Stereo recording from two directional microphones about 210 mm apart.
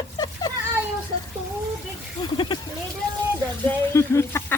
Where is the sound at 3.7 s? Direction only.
15° left (ahead or behind).